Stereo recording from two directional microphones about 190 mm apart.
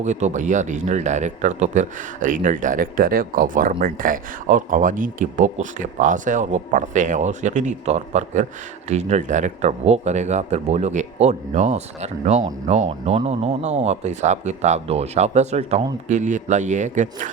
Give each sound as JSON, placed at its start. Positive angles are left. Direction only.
{"t": 0.0, "sound": "a man's voice", "side_deg": -40}